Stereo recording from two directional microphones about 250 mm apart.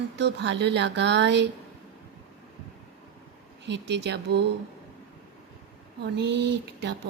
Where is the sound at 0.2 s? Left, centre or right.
Right.